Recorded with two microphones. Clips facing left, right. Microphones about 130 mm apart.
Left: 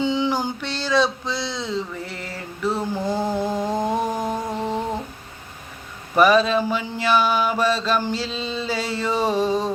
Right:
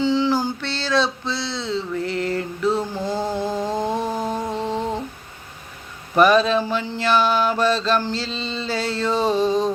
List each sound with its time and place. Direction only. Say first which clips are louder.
0.0 s music: right 2 dB; 15° left (ahead or behind)
4.5 s humming: right 1 dB; 5° left (ahead or behind)
6.1 s mantra: right 1 dB; 5° left (ahead or behind)